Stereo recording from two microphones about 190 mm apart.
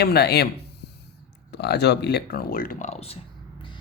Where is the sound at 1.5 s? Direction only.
60° left (ahead or behind); by 3.2 s 30° left (ahead or behind).